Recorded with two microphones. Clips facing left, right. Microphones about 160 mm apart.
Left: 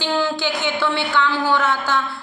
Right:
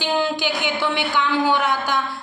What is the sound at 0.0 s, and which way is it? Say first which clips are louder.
A woman's voice: even; 20° right (ahead or behind).